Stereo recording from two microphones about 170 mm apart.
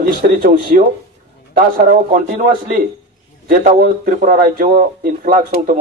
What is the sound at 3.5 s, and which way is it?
A man's voice, 55° right (ahead or behind).